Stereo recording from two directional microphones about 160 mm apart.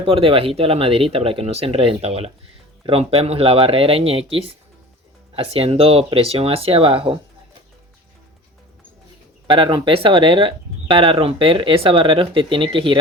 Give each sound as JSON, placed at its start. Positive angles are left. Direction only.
{"t": 0.0, "sound": "speech", "side_deg": -35}
{"t": 5.3, "sound": "speech", "side_deg": -40}
{"t": 9.5, "sound": "speech", "side_deg": -30}